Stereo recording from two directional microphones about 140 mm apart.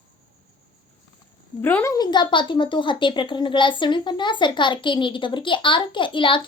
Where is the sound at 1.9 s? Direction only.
30° left (ahead or behind).